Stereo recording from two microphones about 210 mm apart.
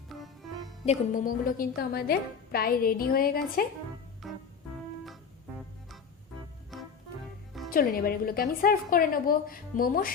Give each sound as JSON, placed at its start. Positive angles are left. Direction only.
{"t": 0.1, "sound": "music", "side_deg": 0}
{"t": 0.9, "sound": "a woman's voice", "side_deg": 40}
{"t": 4.2, "sound": "organ", "side_deg": 0}
{"t": 6.7, "sound": "music", "side_deg": 0}
{"t": 7.7, "sound": "a woman's voice", "side_deg": 40}